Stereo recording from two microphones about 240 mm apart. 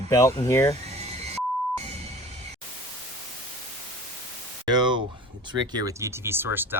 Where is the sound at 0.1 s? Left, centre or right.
Centre.